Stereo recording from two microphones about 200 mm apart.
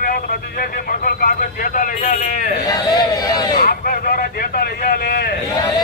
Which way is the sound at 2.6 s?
20° left (ahead or behind).